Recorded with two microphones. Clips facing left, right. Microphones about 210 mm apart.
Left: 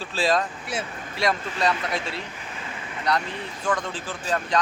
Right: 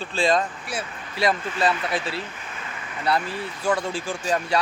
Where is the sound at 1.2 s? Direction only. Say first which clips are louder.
Right 2 dB; centre (ahead or behind).